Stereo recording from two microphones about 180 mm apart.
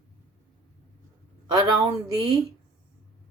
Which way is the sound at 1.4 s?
20° right (ahead or behind).